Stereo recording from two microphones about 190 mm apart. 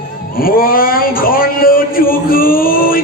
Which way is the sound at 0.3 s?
50° left (ahead or behind).